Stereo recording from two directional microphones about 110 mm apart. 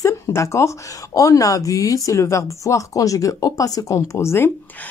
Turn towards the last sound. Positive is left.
turn(degrees=25)  # may be behind; listen again after turning